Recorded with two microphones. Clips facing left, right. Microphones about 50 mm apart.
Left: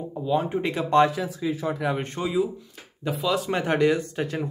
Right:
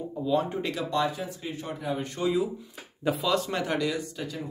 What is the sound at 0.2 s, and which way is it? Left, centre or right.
Speech, left.